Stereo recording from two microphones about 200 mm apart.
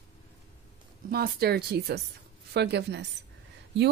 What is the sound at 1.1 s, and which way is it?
A woman's voice, 50° right (ahead or behind).